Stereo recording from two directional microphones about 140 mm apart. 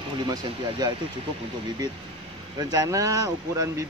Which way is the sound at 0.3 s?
30° right (ahead or behind).